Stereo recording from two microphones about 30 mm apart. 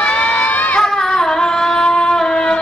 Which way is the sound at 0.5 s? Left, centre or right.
Left.